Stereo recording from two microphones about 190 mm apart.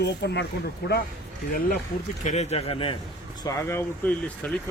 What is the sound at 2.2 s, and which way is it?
Speech, 35° left (ahead or behind).